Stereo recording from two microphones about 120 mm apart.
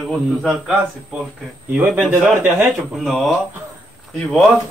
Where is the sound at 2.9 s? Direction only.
Centre (ahead or behind).